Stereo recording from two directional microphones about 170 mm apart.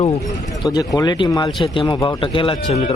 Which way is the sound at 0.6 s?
20° left (ahead or behind).